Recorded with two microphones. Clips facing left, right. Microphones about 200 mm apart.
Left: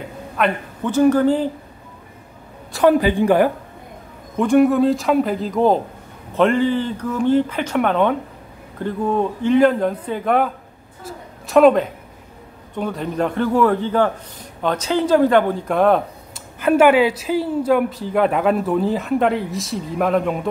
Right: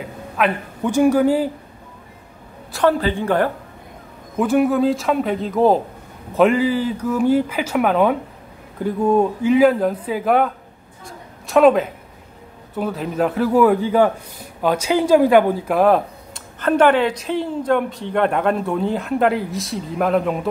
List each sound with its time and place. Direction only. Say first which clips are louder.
0.4 s a man's voice: right 1 dB; centre (ahead or behind)
2.9 s a woman's voice: left 6 dB; 15° left (ahead or behind)
4.4 s a woman's voice: left 2 dB; 5° right (ahead or behind)
11.1 s a sound: left 3 dB; centre (ahead or behind)
12.7 s a man's voice: right 1 dB; 5° right (ahead or behind)
16.5 s a woman's voice: left 2 dB; 10° left (ahead or behind)